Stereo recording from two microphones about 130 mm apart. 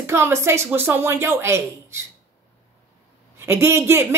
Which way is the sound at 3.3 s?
20° right (ahead or behind).